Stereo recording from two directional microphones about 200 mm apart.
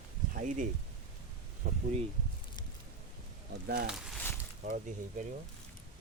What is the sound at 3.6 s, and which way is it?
Speech, 55° right (ahead or behind).